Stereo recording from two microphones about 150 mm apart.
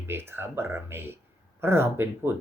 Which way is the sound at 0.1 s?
15° right (ahead or behind).